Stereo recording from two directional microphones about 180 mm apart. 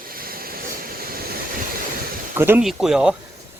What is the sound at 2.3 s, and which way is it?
Speech, 10° right (ahead or behind).